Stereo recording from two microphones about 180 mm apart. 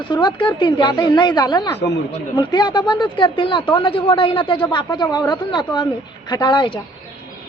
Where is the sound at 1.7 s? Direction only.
70° left (ahead or behind).